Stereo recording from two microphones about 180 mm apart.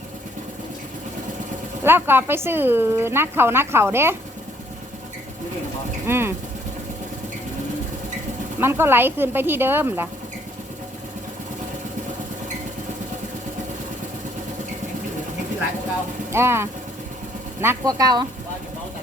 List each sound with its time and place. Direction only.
1.8 s speech: 10° right (ahead or behind)
6.1 s speech: 15° right (ahead or behind)
8.6 s speech: 15° right (ahead or behind)
16.3 s speech: 15° right (ahead or behind)